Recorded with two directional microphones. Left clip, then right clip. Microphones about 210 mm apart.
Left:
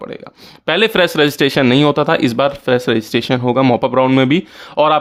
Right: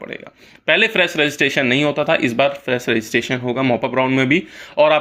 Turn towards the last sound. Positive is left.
turn(degrees=40)  # may be behind; listen again after turning